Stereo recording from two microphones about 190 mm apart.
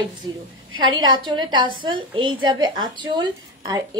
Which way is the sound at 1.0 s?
25° right (ahead or behind).